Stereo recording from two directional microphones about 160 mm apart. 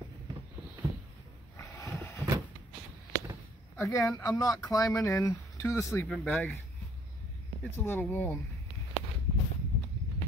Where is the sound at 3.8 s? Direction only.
20° left (ahead or behind).